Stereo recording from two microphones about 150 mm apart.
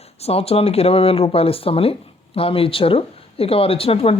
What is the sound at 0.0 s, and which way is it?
Speech, 45° left (ahead or behind).